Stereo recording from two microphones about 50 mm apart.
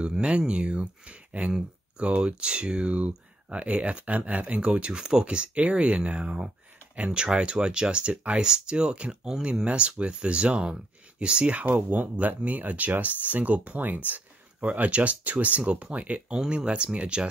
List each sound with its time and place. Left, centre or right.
0.0 s speech: right